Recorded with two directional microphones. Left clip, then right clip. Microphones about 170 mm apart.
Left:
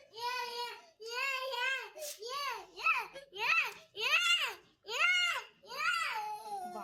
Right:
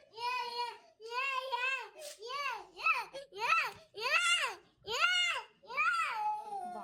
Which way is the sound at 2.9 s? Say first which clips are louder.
Even; 60° right (ahead or behind).